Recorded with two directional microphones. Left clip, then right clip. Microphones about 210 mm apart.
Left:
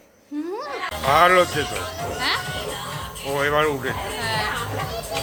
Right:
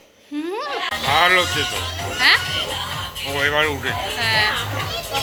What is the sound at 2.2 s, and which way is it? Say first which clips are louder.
Speech: right 9 dB; 10° right (ahead or behind).